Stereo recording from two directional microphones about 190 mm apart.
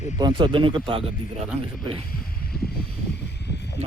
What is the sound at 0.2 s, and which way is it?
Speech, 25° right (ahead or behind).